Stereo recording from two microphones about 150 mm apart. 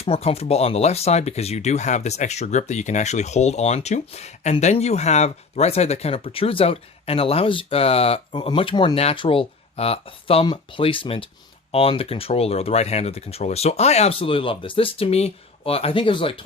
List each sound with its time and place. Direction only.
0.0 s speech: 40° left (ahead or behind)